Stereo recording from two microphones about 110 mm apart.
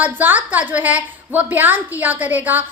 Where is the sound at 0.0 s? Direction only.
15° right (ahead or behind).